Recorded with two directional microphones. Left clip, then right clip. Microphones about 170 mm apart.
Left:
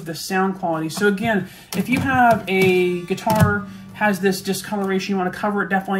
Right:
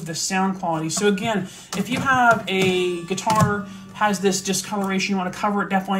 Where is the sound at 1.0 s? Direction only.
30° left (ahead or behind).